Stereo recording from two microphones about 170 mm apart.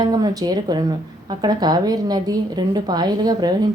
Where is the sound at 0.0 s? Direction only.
25° right (ahead or behind).